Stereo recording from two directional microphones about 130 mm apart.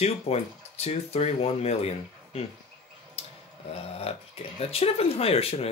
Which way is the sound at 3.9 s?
50° left (ahead or behind).